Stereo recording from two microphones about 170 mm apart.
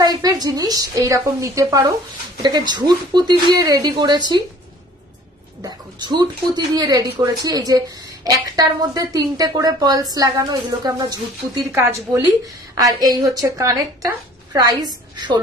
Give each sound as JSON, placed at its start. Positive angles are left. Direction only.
{"t": 0.0, "sound": "a woman's voice", "side_deg": -20}
{"t": 5.6, "sound": "a woman's voice", "side_deg": -25}